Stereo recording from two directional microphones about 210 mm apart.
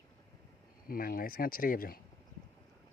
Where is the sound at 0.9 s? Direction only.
45° left (ahead or behind).